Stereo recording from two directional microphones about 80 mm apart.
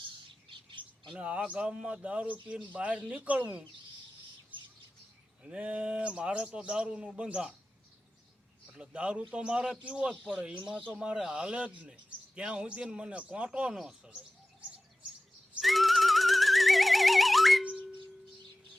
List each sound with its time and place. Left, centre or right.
0.5 s bird: right
1.1 s speech: centre
5.4 s speech: centre
8.7 s speech: centre
15.6 s music: centre